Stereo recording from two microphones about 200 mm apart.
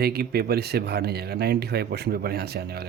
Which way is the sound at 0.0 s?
50° right (ahead or behind).